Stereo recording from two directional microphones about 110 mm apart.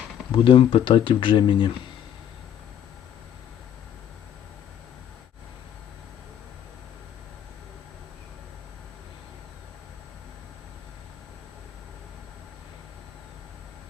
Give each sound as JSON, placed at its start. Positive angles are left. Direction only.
{"t": 0.3, "sound": "speech", "side_deg": 50}